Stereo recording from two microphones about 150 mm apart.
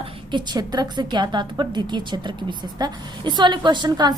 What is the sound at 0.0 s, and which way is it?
A woman's voice, 30° right (ahead or behind).